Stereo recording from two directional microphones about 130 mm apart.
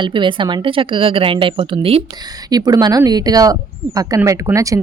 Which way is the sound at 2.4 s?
30° right (ahead or behind).